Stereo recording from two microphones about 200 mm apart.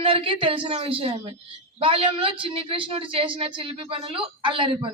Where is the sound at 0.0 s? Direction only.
25° right (ahead or behind).